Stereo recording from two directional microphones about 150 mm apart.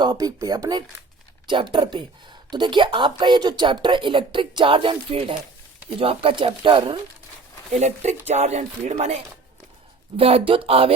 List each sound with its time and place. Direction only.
0.0 s speech: 25° right (ahead or behind)
7.7 s speech: 50° right (ahead or behind)
10.2 s speech: 40° right (ahead or behind)